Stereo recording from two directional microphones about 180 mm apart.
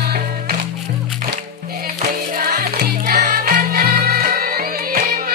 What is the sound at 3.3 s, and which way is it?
Music, 50° right (ahead or behind).